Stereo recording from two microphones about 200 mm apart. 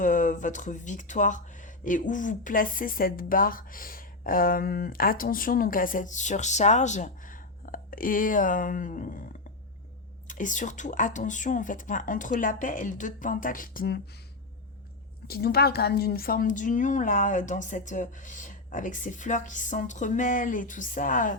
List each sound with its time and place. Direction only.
0.0 s a woman's voice: 40° left (ahead or behind)
15.3 s a woman's voice: 50° left (ahead or behind)